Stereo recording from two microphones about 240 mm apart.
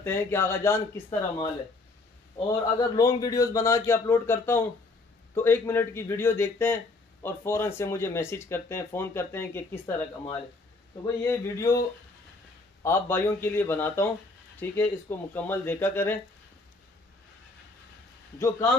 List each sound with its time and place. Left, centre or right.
0.0 s speech: centre
11.2 s speech: centre
12.8 s speech: centre